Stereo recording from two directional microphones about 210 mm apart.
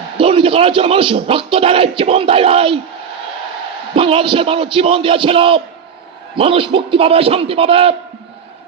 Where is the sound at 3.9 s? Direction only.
25° right (ahead or behind).